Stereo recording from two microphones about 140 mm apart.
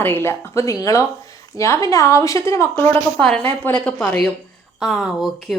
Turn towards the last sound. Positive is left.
turn(degrees=0)  # may be behind; listen again after turning